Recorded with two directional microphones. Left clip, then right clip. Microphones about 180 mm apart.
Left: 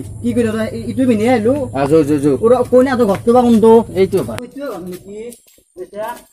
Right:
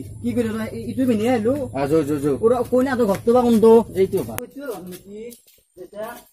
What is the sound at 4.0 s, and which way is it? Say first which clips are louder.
Speech: left 6 dB; 30° left (ahead or behind).